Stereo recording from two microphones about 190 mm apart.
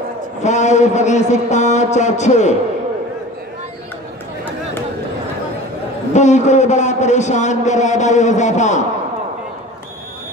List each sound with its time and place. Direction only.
0.4 s a man's voice: 35° left (ahead or behind)
6.1 s a man's voice: 40° left (ahead or behind)